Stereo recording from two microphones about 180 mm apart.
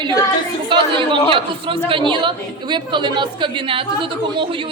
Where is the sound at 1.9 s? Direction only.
25° right (ahead or behind).